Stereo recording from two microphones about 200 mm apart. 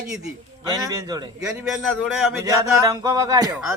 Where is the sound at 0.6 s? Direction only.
20° right (ahead or behind).